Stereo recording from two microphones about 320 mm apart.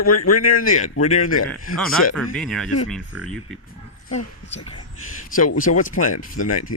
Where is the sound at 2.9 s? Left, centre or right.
Centre.